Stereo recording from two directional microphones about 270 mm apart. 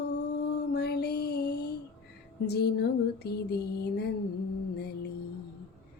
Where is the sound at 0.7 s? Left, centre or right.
Left.